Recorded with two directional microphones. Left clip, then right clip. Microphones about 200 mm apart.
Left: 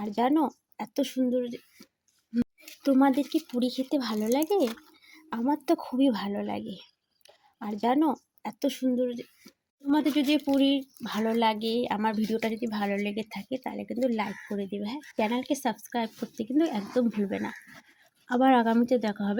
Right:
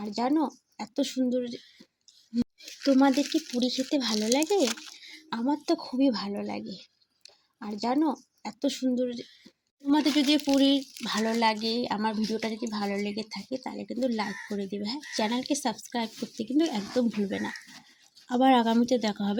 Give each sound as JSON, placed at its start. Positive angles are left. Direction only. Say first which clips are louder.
{"t": 0.0, "sound": "a woman's voice", "louder": "left 2 dB", "side_deg": 20}
{"t": 5.6, "sound": "a woman's voice", "louder": "left 1 dB", "side_deg": 20}